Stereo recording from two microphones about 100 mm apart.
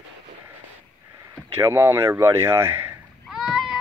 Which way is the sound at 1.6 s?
25° right (ahead or behind).